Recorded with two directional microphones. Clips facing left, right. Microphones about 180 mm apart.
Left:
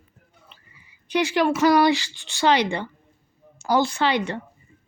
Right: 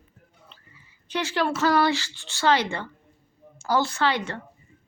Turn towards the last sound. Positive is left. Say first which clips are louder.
# left 3 dB
turn(degrees=15)  # may be behind; listen again after turning